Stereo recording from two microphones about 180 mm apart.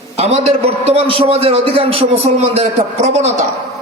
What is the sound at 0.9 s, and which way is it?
A man's voice, 30° right (ahead or behind).